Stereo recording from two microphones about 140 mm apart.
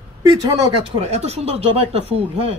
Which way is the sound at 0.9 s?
50° right (ahead or behind).